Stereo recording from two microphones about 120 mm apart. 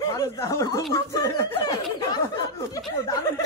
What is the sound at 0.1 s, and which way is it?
Speech, 25° left (ahead or behind).